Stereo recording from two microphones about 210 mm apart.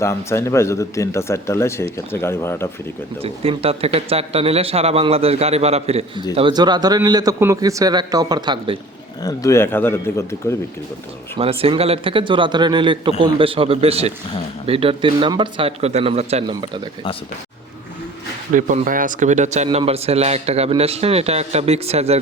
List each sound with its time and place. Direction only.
0.0 s speech: 15° left (ahead or behind)
3.2 s speech: 30° right (ahead or behind)
9.2 s speech: 15° left (ahead or behind)
11.3 s speech: 25° right (ahead or behind)
18.5 s speech: 40° right (ahead or behind)